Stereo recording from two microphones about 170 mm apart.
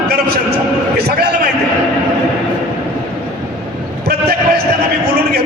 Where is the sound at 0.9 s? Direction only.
70° right (ahead or behind).